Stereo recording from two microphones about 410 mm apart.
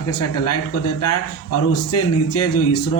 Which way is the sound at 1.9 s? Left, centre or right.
Left.